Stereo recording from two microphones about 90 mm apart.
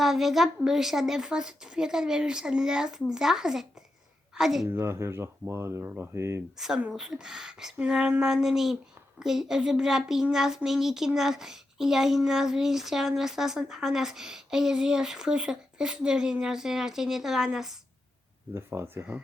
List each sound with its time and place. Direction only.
0.0 s a woman's voice: 5° right (ahead or behind)
4.7 s speech: 30° right (ahead or behind)
6.6 s speech: 5° right (ahead or behind)
18.5 s speech: 30° right (ahead or behind)